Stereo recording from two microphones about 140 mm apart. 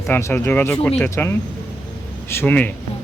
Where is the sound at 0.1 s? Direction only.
20° left (ahead or behind).